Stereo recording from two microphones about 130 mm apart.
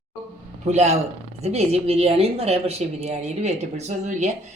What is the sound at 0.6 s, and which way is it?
Speech, 60° right (ahead or behind).